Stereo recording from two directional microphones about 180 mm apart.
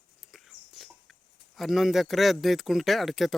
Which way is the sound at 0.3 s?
Centre (ahead or behind).